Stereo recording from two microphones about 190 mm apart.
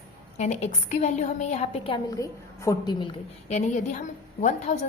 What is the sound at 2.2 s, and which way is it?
Speech, 15° left (ahead or behind).